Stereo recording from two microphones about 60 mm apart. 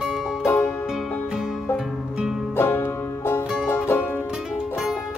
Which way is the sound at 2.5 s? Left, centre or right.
Left.